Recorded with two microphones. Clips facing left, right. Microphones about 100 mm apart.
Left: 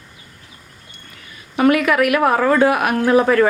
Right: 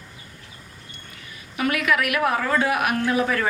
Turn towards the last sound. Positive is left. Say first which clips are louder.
# left 8 dB
turn(degrees=45)  # may be behind; listen again after turning